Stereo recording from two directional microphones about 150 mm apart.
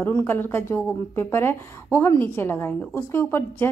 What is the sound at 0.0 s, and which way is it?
A woman's voice, 15° left (ahead or behind).